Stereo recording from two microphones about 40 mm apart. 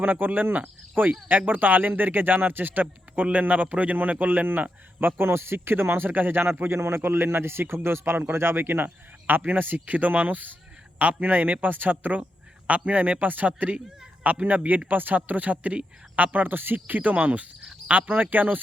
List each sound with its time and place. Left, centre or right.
0.0 s speech: right
2.8 s a man's voice: right
4.9 s a man's voice: right
9.8 s speech: right